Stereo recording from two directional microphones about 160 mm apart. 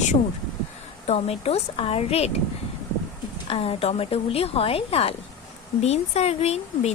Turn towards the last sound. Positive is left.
turn(degrees=40)  # may be behind; listen again after turning